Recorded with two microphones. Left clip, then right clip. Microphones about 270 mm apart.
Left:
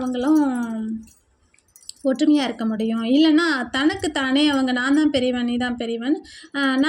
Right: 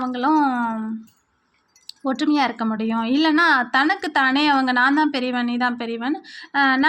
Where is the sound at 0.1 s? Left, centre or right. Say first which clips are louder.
Right 1 dB; centre.